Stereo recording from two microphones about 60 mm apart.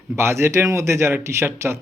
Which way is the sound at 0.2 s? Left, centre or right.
Right.